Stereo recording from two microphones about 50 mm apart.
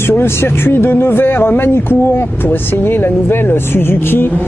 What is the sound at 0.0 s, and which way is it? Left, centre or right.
Speech, left.